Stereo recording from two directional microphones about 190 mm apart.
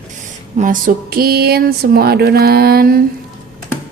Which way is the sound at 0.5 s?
45° right (ahead or behind).